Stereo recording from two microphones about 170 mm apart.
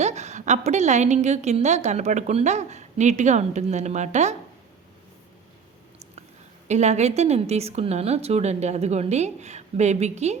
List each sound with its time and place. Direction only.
0.0 s a woman's voice: 40° right (ahead or behind)
6.7 s a woman's voice: 40° right (ahead or behind)